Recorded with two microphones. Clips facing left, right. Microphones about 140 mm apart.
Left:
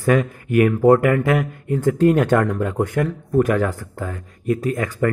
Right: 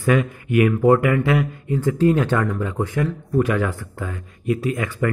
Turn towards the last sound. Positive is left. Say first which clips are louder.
# left 2 dB
turn(degrees=40)  # may be behind; listen again after turning